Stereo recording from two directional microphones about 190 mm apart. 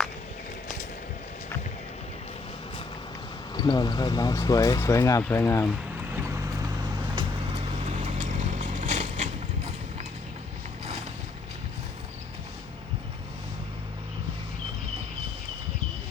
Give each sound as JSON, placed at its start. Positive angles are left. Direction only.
{"t": 3.5, "sound": "speech", "side_deg": 20}
{"t": 7.9, "sound": "vehicle", "side_deg": -35}